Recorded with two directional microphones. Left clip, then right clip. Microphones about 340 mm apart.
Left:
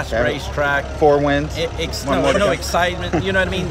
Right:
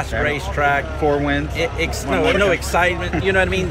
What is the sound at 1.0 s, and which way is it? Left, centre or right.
Speech, left.